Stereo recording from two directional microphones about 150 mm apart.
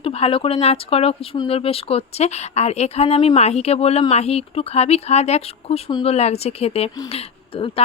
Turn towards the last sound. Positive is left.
turn(degrees=40)  # may be behind; listen again after turning